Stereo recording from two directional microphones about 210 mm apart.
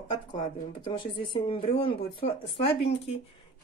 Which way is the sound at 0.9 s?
25° left (ahead or behind).